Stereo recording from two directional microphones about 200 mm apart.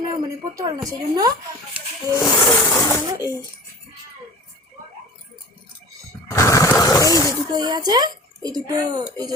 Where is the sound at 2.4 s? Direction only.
10° left (ahead or behind).